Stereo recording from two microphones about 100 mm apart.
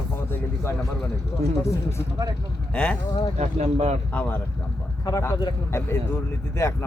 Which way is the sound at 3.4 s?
90° right.